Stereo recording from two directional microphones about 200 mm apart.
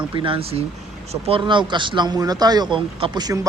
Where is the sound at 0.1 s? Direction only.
25° right (ahead or behind).